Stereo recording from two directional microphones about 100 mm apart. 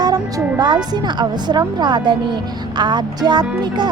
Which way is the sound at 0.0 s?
40° right (ahead or behind).